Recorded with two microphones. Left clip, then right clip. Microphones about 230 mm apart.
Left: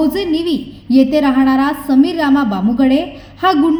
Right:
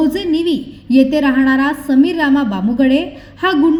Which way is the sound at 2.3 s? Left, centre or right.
Right.